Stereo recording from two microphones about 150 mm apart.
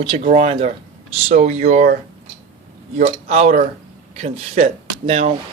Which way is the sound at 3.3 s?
50° right (ahead or behind).